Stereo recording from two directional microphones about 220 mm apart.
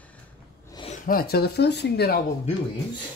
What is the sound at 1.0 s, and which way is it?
Speech, 45° left (ahead or behind).